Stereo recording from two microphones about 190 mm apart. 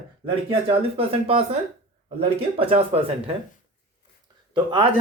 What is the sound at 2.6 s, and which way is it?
Speech, 30° right (ahead or behind).